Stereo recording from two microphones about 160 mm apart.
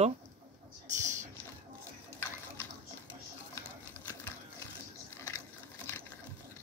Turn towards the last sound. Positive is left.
turn(degrees=15)  # may be behind; listen again after turning